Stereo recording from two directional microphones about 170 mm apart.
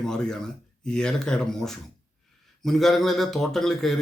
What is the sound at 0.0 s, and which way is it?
Speech, 5° left (ahead or behind).